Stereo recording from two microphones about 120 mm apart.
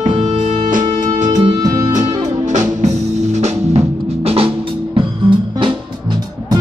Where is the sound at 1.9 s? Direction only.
85° right.